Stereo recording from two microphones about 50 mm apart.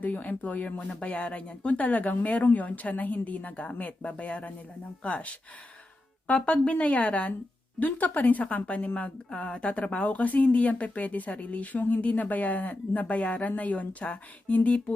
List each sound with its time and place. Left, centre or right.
0.0 s speech: left